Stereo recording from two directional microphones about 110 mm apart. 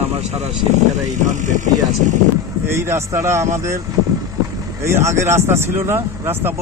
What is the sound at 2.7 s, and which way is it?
Speech, 25° right (ahead or behind).